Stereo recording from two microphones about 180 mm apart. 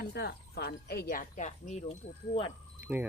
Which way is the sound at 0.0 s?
65° left (ahead or behind).